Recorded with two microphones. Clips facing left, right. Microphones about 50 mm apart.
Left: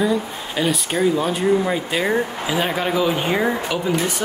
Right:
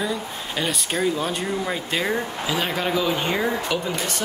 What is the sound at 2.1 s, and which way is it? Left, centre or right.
Speech, centre.